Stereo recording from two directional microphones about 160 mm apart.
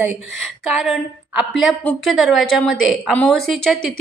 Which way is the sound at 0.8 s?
Centre (ahead or behind).